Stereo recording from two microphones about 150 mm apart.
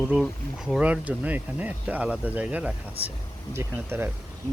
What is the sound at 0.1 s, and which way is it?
Speech, centre (ahead or behind).